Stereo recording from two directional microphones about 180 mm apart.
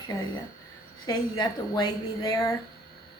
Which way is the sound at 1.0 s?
20° left (ahead or behind).